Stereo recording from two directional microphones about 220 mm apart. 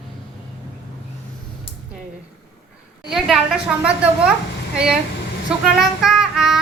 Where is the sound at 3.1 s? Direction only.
Centre (ahead or behind).